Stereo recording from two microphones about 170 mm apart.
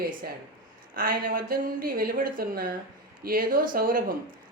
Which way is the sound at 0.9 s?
55° right (ahead or behind).